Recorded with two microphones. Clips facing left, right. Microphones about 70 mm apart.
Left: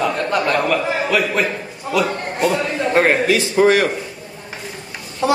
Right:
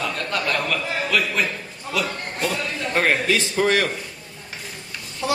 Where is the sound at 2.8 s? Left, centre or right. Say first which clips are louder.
Left 5 dB; left.